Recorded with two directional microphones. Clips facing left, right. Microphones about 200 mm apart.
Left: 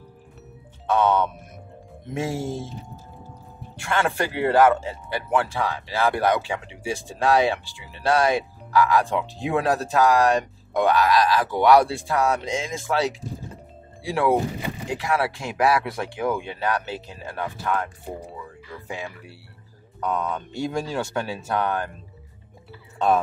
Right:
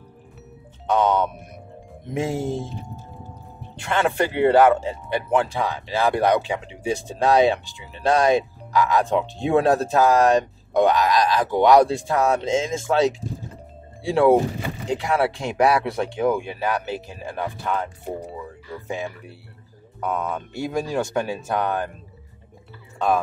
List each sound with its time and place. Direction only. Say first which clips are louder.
0.8 s speech: right 1 dB; 15° right (ahead or behind)
3.7 s speech: right 2 dB; 20° right (ahead or behind)
16.4 s speech: right 1 dB; 10° right (ahead or behind)
18.9 s speech: right 4 dB; 20° right (ahead or behind)
20.0 s speech: even; 10° right (ahead or behind)
22.9 s speech: left 1 dB; centre (ahead or behind)